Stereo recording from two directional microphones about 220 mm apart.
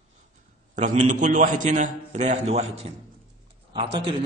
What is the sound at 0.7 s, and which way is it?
A man's voice, 35° right (ahead or behind).